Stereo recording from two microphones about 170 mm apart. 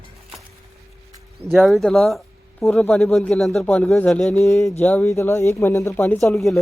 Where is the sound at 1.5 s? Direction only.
Centre (ahead or behind).